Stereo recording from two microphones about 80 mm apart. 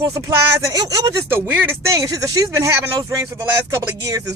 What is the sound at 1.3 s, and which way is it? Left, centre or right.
Speech, right.